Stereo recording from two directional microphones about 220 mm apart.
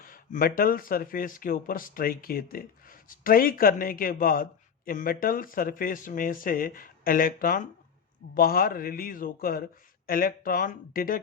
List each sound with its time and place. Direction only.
0.0 s speech: 40° left (ahead or behind)